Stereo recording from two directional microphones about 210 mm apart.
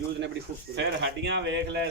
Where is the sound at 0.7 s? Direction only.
55° right (ahead or behind).